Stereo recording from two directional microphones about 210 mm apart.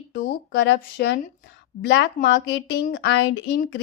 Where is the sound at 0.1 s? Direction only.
50° left (ahead or behind).